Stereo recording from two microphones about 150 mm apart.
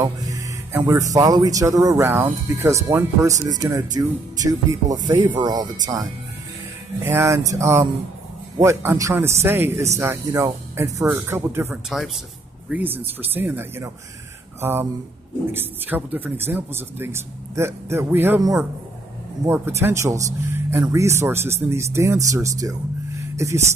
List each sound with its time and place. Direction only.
0.0 s speech: 20° right (ahead or behind)
19.4 s speech: 15° right (ahead or behind)